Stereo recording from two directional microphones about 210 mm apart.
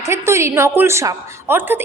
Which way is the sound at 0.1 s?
15° right (ahead or behind).